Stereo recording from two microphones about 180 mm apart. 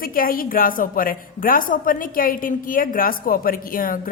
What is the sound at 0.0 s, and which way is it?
A woman's voice, 55° left (ahead or behind).